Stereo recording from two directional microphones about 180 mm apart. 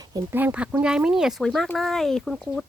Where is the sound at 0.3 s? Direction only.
10° right (ahead or behind).